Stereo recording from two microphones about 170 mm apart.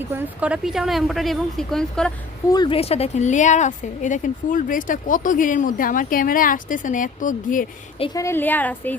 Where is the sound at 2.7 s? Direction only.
35° left (ahead or behind).